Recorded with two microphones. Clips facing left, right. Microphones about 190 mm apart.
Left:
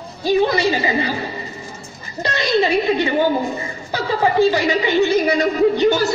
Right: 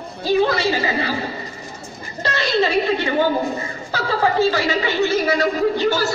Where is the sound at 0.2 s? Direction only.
15° left (ahead or behind).